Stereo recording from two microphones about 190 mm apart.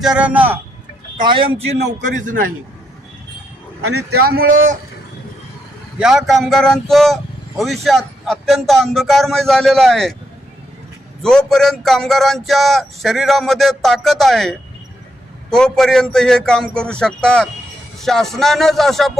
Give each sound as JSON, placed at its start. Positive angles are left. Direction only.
{"t": 0.0, "sound": "a man's voice", "side_deg": -5}
{"t": 1.2, "sound": "a man's voice", "side_deg": -25}
{"t": 2.0, "sound": "speech", "side_deg": -40}
{"t": 3.8, "sound": "speech", "side_deg": -55}
{"t": 6.0, "sound": "speech", "side_deg": -5}
{"t": 11.2, "sound": "speech", "side_deg": 5}